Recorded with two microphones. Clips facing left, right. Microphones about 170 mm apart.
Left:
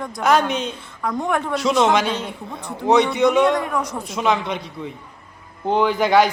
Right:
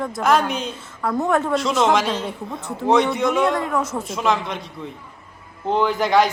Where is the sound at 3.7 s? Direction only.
25° right (ahead or behind).